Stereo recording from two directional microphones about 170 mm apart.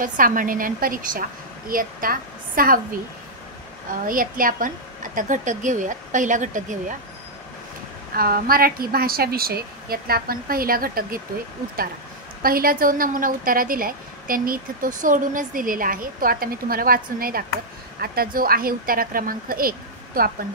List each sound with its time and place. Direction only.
0.0 s a woman's voice: 55° right (ahead or behind)
4.1 s a woman's voice: 55° right (ahead or behind)
8.2 s a woman's voice: 60° right (ahead or behind)
12.4 s a woman's voice: 60° right (ahead or behind)